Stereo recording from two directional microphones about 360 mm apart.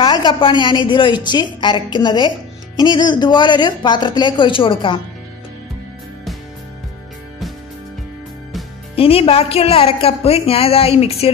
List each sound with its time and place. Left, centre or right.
0.0 s speech: centre
8.9 s speech: centre